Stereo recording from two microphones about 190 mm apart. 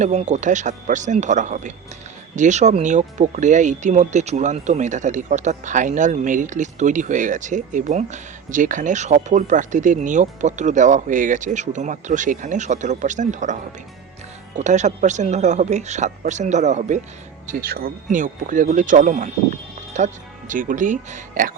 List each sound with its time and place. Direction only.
0.0 s speech: 35° right (ahead or behind)